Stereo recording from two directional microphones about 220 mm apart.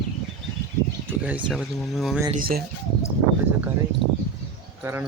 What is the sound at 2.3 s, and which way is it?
Speech, 40° right (ahead or behind).